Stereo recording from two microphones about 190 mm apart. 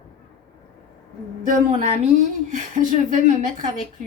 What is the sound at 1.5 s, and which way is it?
A woman's voice, 40° right (ahead or behind).